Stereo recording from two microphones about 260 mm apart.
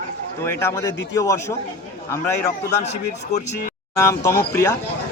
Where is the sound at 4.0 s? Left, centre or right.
Centre.